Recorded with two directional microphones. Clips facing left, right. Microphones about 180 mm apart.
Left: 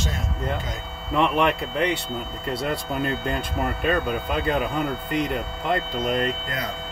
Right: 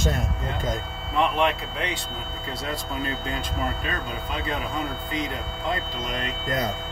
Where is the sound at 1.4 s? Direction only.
60° left (ahead or behind).